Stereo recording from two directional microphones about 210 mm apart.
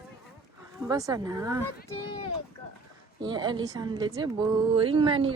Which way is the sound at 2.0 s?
25° left (ahead or behind).